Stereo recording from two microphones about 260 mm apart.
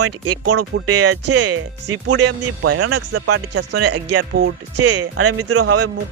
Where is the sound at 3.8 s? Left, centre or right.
Right.